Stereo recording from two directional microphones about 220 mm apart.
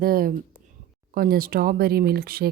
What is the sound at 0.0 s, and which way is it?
Speech, 40° right (ahead or behind).